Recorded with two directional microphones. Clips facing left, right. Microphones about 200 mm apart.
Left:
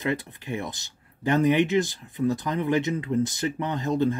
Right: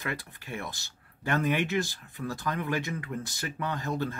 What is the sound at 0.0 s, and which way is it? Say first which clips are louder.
Speech: left 8 dB; 20° left (ahead or behind).